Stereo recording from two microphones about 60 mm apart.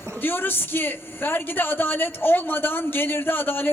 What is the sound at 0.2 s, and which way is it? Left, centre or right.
A man's voice, left.